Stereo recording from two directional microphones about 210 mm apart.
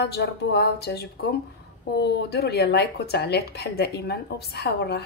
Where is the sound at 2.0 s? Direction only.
50° left (ahead or behind).